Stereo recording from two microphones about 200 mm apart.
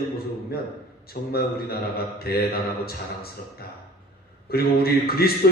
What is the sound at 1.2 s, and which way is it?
A man's voice, 50° left (ahead or behind).